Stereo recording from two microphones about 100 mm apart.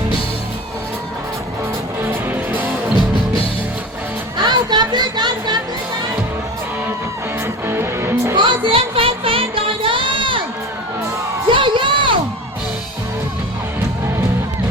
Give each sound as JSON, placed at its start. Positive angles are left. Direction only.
{"t": 2.3, "sound": "music", "side_deg": -20}
{"t": 4.4, "sound": "music", "side_deg": -45}
{"t": 7.4, "sound": "music", "side_deg": -25}
{"t": 8.4, "sound": "a sound", "side_deg": -55}
{"t": 11.4, "sound": "music", "side_deg": -55}